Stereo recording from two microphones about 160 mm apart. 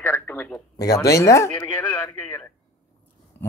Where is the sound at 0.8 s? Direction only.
20° left (ahead or behind).